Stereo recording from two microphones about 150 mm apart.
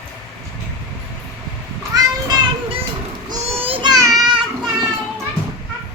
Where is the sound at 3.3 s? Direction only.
45° right (ahead or behind).